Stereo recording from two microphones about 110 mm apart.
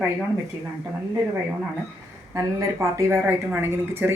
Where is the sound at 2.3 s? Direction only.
25° right (ahead or behind).